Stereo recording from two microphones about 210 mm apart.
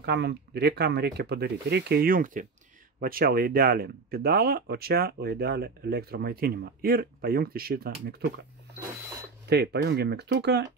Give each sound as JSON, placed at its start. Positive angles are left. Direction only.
{"t": 0.0, "sound": "speech", "side_deg": -55}
{"t": 9.5, "sound": "speech", "side_deg": -50}